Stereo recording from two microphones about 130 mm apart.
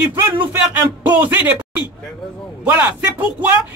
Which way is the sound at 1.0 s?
15° right (ahead or behind).